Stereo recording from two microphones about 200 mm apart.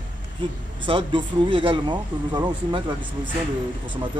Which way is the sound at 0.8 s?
25° right (ahead or behind).